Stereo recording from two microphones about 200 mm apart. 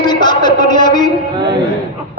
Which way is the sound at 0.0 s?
20° left (ahead or behind).